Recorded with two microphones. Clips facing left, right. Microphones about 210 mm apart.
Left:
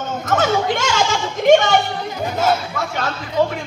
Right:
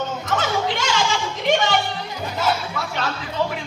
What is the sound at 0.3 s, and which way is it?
Music, 45° left (ahead or behind).